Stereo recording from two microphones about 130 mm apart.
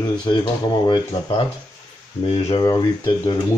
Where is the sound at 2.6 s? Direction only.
35° left (ahead or behind).